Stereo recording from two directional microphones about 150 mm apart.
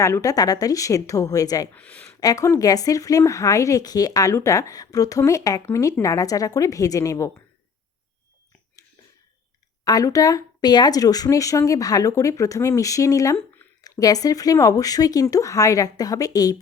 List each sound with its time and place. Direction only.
0.0 s speech: 20° left (ahead or behind)
1.7 s speech: 10° left (ahead or behind)
2.2 s speech: 20° left (ahead or behind)
9.8 s speech: 25° left (ahead or behind)